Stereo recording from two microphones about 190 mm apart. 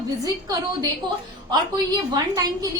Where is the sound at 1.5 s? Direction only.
20° right (ahead or behind).